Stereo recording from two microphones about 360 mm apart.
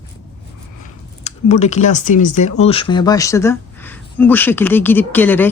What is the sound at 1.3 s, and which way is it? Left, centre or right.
Speech, centre.